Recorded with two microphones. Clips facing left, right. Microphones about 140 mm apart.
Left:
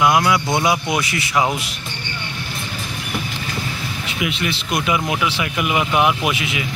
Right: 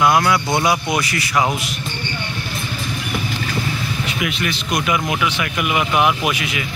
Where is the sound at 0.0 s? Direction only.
15° left (ahead or behind).